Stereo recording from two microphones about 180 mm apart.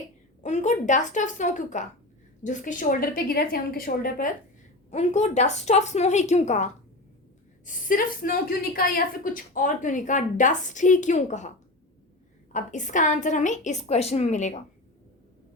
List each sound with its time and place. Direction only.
0.4 s a woman's voice: 40° left (ahead or behind)
4.9 s a woman's voice: 40° left (ahead or behind)
12.5 s a woman's voice: 45° left (ahead or behind)